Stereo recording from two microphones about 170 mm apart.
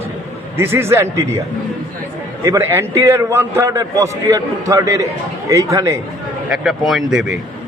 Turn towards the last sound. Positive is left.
turn(degrees=0)  # may be behind; listen again after turning